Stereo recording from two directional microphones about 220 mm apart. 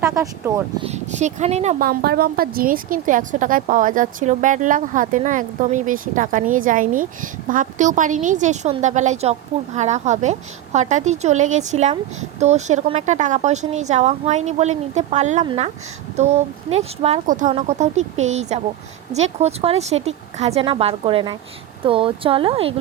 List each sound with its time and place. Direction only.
0.0 s speech: 15° right (ahead or behind)
0.9 s a woman's voice: 30° right (ahead or behind)
1.8 s a woman's voice: 45° right (ahead or behind); by 22.7 s 25° right (ahead or behind)